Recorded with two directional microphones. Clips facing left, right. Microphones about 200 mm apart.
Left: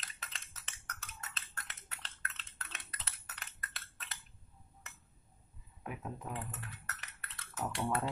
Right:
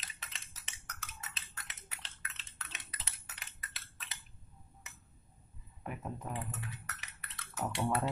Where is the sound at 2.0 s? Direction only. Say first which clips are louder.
Left 3 dB; centre (ahead or behind).